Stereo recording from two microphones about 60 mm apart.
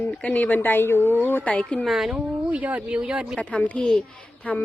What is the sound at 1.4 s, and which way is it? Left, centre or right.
Speech, left.